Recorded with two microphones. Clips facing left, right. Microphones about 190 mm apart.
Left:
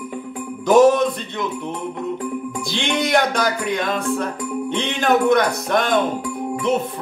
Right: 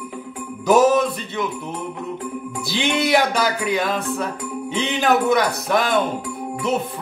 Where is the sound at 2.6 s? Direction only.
5° right (ahead or behind).